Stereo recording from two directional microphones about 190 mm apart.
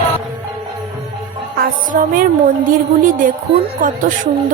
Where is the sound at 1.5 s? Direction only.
50° right (ahead or behind).